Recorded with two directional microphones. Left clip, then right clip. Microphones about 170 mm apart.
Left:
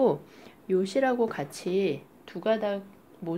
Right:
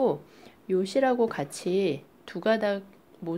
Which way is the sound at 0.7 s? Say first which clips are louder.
Right 1 dB; 15° right (ahead or behind).